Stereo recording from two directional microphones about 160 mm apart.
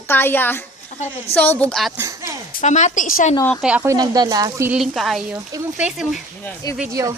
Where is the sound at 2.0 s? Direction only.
20° right (ahead or behind).